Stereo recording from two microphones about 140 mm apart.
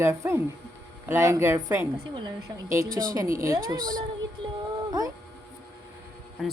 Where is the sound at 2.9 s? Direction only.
80° right.